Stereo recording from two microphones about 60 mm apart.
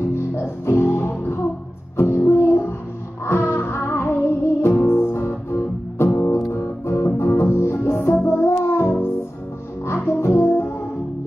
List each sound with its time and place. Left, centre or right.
0.0 s music: left
10.0 s music: left